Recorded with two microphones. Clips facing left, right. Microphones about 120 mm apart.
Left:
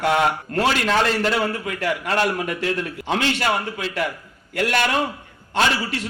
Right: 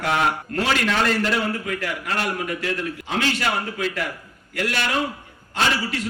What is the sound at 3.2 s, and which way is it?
Speech, 35° left (ahead or behind).